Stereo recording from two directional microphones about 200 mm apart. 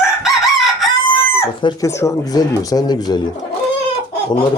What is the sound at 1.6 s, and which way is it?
Speech, 20° left (ahead or behind).